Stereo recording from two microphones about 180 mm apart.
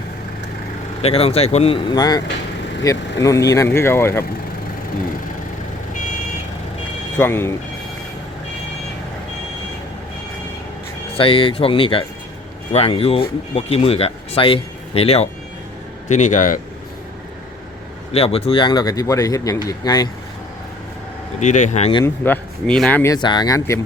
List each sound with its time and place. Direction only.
1.0 s speech: 35° left (ahead or behind); by 4.3 s 15° left (ahead or behind)
7.2 s speech: 15° left (ahead or behind)
11.2 s speech: 30° left (ahead or behind); by 16.6 s 45° left (ahead or behind)
18.1 s speech: 35° left (ahead or behind)
21.4 s speech: 40° left (ahead or behind)
22.0 s speech: 10° left (ahead or behind)
23.1 s speech: 25° left (ahead or behind)